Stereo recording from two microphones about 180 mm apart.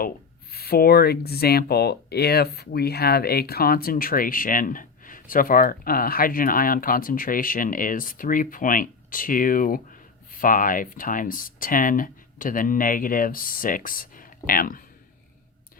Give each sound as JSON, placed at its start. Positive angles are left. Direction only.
{"t": 0.5, "sound": "speech", "side_deg": 60}